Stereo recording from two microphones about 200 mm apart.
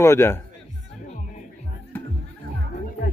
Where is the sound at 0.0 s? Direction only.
15° left (ahead or behind).